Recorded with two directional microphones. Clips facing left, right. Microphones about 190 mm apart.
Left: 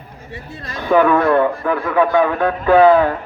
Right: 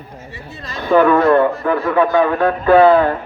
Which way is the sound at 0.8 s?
10° left (ahead or behind).